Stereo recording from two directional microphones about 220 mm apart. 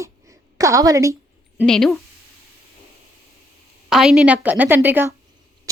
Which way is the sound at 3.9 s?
Centre (ahead or behind).